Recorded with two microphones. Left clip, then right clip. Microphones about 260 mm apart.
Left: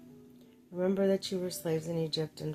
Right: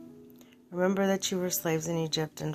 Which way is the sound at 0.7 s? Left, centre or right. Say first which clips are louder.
Right 2 dB; centre.